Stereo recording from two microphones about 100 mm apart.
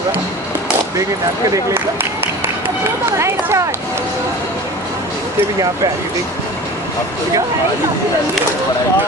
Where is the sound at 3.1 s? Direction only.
30° right (ahead or behind).